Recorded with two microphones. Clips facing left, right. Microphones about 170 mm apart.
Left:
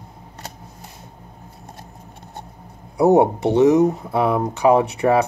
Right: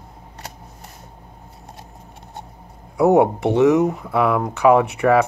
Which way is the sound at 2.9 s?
35° left (ahead or behind).